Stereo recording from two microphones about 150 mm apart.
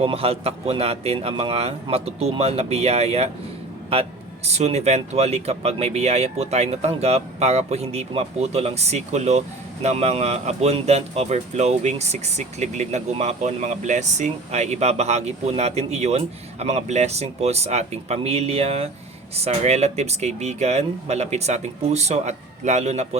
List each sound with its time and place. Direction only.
0.0 s a man's voice: 40° right (ahead or behind)